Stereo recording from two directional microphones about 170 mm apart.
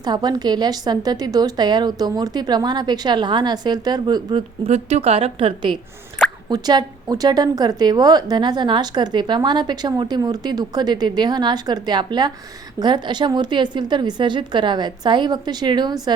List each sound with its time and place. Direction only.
0.0 s a woman's voice: 25° right (ahead or behind)